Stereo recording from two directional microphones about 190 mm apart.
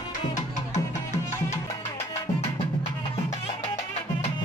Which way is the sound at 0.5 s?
40° left (ahead or behind).